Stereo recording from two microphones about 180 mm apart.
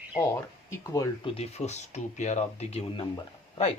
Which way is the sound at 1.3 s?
35° left (ahead or behind).